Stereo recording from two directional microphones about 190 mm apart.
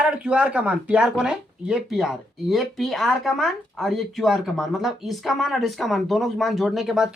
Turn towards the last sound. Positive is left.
turn(degrees=0)  # may be behind; listen again after turning